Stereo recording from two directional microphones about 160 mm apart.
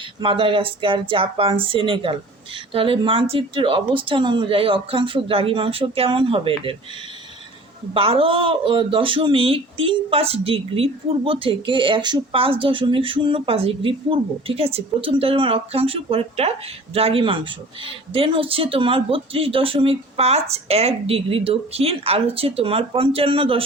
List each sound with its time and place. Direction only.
0.2 s speech: 35° right (ahead or behind)
7.9 s speech: 35° right (ahead or behind)